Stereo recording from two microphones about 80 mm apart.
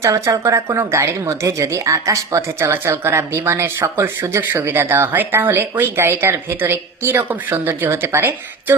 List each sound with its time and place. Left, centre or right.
0.0 s a woman's voice: right